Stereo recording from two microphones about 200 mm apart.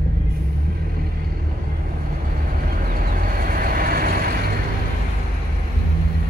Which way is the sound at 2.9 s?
45° right (ahead or behind).